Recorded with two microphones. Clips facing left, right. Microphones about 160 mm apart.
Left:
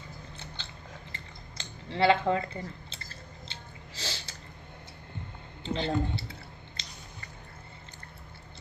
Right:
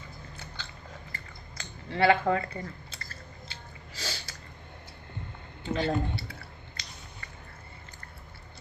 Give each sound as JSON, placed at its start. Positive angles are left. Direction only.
{"t": 0.3, "sound": "biting", "side_deg": 25}
{"t": 1.1, "sound": "a sound", "side_deg": 25}
{"t": 5.6, "sound": "speech", "side_deg": 25}